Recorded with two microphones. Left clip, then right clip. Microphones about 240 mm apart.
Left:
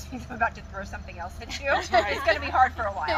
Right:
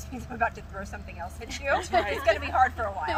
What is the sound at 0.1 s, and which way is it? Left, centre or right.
Speech, centre.